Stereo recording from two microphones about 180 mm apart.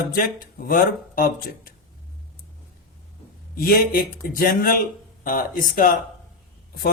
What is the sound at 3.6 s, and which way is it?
Speech, 55° left (ahead or behind).